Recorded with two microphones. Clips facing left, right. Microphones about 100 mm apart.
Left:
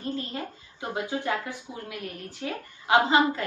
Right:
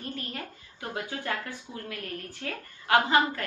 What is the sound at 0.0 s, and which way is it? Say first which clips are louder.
A woman's voice: left 5 dB; 25° left (ahead or behind).